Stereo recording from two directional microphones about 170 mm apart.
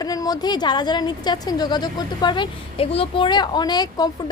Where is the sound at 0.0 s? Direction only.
20° left (ahead or behind).